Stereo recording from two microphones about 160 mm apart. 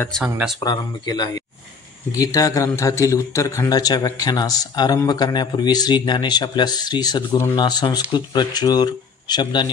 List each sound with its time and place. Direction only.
0.6 s a man's voice: 25° left (ahead or behind)